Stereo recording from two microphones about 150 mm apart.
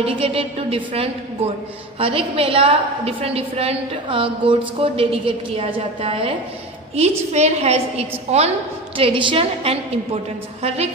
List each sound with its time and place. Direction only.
0.0 s a woman's voice: 40° right (ahead or behind)
8.9 s a woman's voice: 35° right (ahead or behind)